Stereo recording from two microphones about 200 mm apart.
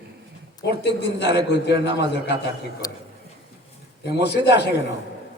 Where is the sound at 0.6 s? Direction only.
55° left (ahead or behind).